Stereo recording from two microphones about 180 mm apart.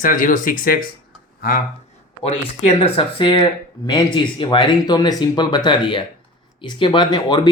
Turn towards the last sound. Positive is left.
turn(degrees=20)  # may be behind; listen again after turning